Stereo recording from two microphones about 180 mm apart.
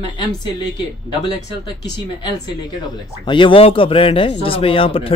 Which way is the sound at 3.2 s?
25° left (ahead or behind).